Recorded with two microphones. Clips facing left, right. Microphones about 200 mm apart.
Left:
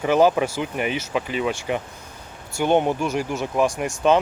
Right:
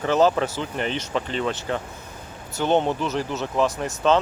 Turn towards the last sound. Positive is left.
turn(degrees=15)  # may be behind; listen again after turning